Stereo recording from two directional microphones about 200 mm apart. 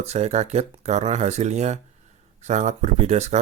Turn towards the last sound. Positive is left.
turn(degrees=-35)  # may be behind; listen again after turning